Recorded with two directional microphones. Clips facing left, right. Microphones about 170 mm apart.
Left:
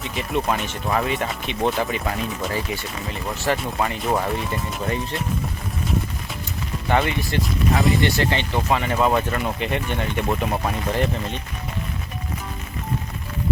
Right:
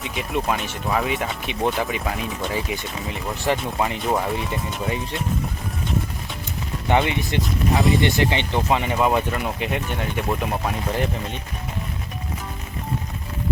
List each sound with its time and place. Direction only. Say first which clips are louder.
0.0 s speech: left 1 dB; 5° right (ahead or behind)
4.0 s speech: even; centre (ahead or behind)
7.1 s speech: even; 20° right (ahead or behind)
7.4 s speech: even; centre (ahead or behind)
8.0 s speech: right 1 dB; 15° right (ahead or behind)